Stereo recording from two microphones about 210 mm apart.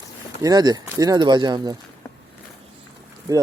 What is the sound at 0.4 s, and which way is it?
Speech, 20° right (ahead or behind).